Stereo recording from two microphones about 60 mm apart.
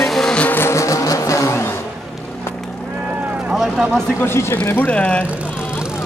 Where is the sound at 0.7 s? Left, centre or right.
Left.